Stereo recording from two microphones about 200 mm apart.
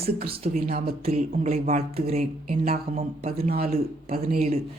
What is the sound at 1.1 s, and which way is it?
Speech, 30° right (ahead or behind).